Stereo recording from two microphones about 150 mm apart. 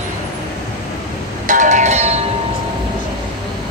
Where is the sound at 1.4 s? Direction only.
60° right (ahead or behind).